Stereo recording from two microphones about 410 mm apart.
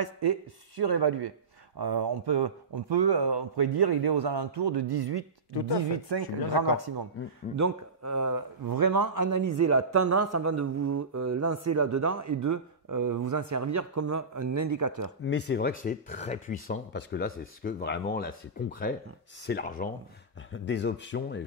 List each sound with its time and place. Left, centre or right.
0.0 s speech: right
7.5 s speech: right
15.2 s speech: left